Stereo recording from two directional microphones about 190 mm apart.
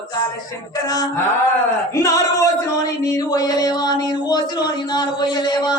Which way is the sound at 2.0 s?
15° left (ahead or behind).